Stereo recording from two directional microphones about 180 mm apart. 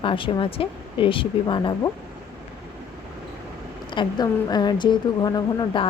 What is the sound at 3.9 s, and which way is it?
A woman's voice, 25° left (ahead or behind).